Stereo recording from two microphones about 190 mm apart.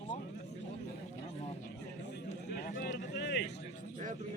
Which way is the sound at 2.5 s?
50° left (ahead or behind).